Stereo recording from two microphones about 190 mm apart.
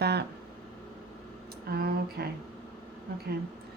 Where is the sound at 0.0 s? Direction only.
60° right (ahead or behind).